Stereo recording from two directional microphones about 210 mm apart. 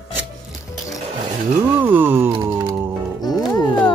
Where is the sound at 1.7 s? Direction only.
10° right (ahead or behind).